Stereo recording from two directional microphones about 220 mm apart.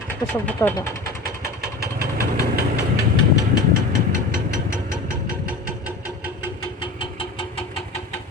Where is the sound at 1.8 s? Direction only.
45° right (ahead or behind).